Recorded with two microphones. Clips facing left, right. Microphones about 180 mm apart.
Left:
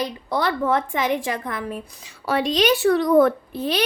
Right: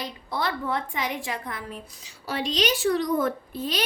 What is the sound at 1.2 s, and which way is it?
A woman's voice, 50° left (ahead or behind).